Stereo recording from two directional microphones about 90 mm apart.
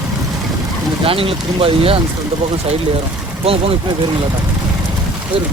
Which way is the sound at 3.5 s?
90° right.